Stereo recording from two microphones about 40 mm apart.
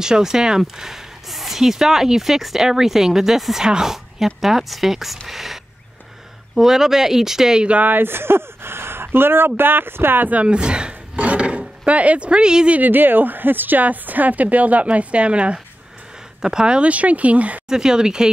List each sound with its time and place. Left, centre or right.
0.0 s a woman's voice: centre
7.8 s speech: right
8.1 s speech: right
10.3 s speech: right
12.8 s speech: right
16.3 s speech: centre
16.9 s speech: right
17.6 s speech: centre